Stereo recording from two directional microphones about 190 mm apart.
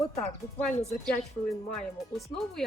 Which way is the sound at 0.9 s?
5° left (ahead or behind).